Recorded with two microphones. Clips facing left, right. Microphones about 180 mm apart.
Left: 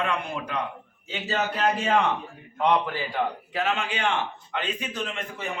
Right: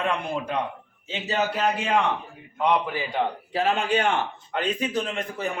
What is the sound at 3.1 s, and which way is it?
A man's voice, 35° right (ahead or behind).